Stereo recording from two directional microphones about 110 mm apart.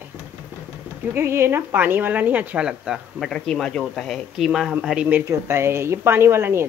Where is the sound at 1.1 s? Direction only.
20° right (ahead or behind).